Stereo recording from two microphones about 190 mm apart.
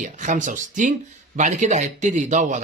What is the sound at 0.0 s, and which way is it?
Speech, 40° right (ahead or behind).